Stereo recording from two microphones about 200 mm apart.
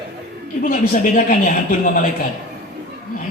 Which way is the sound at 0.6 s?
40° left (ahead or behind).